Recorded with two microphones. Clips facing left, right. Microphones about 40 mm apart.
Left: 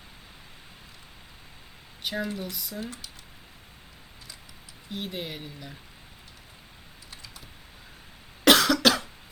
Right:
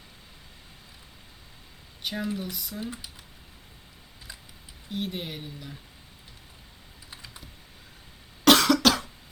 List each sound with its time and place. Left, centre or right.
2.0 s speech: centre
2.8 s speech: centre
4.9 s speech: centre
7.1 s computer keyboard: right
8.4 s cough: centre